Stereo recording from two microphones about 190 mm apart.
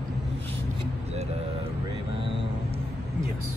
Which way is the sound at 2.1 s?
30° right (ahead or behind).